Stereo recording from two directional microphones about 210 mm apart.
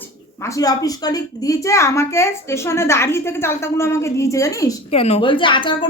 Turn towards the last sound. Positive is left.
turn(degrees=25)  # may be behind; listen again after turning